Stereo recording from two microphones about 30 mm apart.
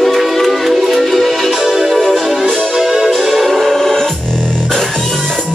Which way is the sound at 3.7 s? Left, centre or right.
Centre.